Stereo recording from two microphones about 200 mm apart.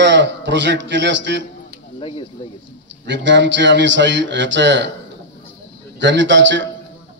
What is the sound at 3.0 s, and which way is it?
A man's voice, 65° right (ahead or behind).